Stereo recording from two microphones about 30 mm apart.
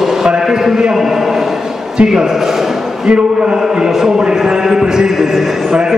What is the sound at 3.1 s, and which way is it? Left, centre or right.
Speech, right.